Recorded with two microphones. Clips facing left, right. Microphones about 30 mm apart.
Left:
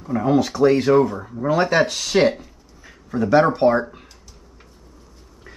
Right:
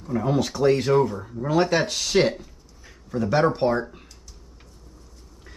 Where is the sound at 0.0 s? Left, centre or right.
Centre.